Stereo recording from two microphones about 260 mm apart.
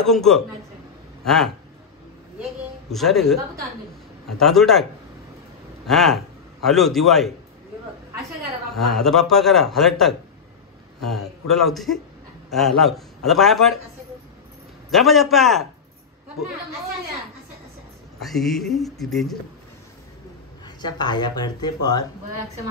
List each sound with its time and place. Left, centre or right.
0.0 s a man's voice: centre
2.9 s a man's voice: centre
5.9 s a man's voice: centre
8.4 s a man's voice: centre
14.9 s a man's voice: centre
18.2 s a man's voice: centre
20.6 s speech: centre